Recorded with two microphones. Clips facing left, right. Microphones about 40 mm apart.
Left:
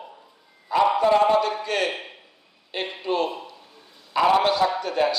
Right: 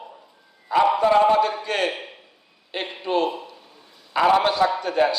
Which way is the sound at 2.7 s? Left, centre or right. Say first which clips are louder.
Right 1 dB; right.